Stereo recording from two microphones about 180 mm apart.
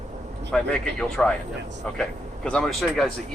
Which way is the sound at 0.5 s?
5° left (ahead or behind).